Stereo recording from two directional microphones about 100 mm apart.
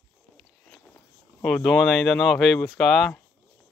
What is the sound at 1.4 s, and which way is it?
Speech, 10° left (ahead or behind).